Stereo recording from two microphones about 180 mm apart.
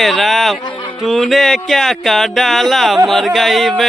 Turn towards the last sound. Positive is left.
turn(degrees=0)  # may be behind; listen again after turning